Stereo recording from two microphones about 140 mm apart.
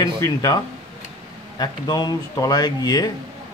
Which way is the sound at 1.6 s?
30° left (ahead or behind).